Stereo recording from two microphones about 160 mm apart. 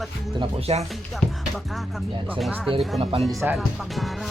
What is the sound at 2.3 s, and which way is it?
Speech, 10° right (ahead or behind).